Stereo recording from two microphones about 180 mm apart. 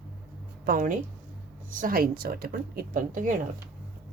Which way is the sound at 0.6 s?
50° right (ahead or behind).